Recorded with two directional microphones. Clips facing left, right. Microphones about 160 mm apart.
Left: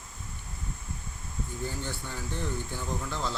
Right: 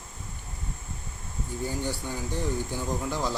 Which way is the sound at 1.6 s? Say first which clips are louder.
Right 6 dB; 15° right (ahead or behind).